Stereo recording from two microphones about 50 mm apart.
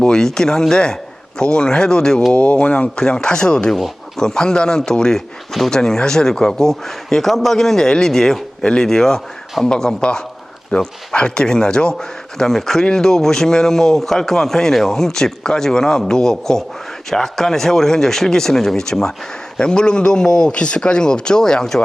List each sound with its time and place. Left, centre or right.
0.0 s speech: centre
2.3 s speech: left